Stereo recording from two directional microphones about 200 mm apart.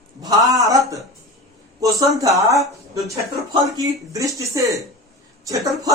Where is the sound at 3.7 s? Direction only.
15° right (ahead or behind).